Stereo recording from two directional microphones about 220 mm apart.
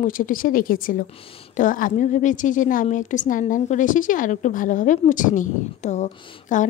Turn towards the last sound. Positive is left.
turn(degrees=35)  # may be behind; listen again after turning